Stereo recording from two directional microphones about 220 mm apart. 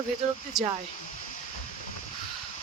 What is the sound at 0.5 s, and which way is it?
Speech, centre (ahead or behind).